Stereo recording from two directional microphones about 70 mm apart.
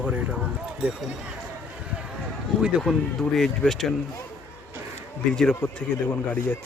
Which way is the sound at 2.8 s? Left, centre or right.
Centre.